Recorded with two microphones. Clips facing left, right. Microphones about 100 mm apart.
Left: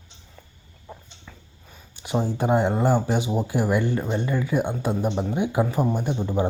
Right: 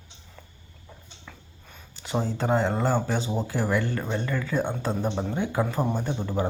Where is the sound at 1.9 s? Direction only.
15° left (ahead or behind).